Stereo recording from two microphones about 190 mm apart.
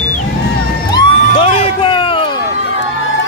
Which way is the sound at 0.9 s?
30° left (ahead or behind).